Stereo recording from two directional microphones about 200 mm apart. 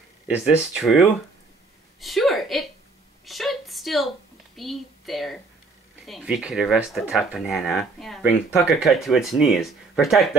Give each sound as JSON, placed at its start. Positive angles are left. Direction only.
{"t": 0.3, "sound": "speech", "side_deg": -5}
{"t": 2.0, "sound": "a sound", "side_deg": 0}
{"t": 4.6, "sound": "speech", "side_deg": 0}